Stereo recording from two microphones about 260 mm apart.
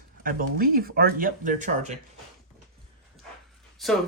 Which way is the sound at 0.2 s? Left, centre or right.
Right.